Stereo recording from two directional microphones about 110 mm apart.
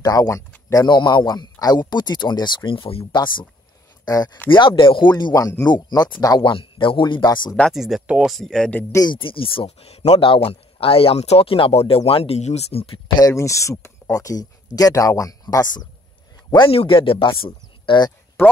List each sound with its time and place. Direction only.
0.0 s speech: 35° left (ahead or behind); by 3.2 s 55° left (ahead or behind)
4.0 s speech: 35° left (ahead or behind)
4.5 s speech: 50° left (ahead or behind)
5.1 s speech: 35° left (ahead or behind)
7.7 s speech: 5° right (ahead or behind)
8.3 s speech: 5° left (ahead or behind)
8.9 s speech: 45° left (ahead or behind); by 12.8 s 75° left (ahead or behind)
13.2 s a man's voice: 25° left (ahead or behind); by 16.7 s 45° left (ahead or behind)
16.7 s speech: 55° left (ahead or behind)
17.5 s a sound: 45° left (ahead or behind)